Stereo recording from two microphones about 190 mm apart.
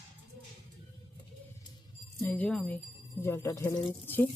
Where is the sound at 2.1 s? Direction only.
10° left (ahead or behind).